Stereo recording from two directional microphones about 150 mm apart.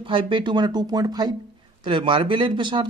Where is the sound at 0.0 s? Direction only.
35° right (ahead or behind).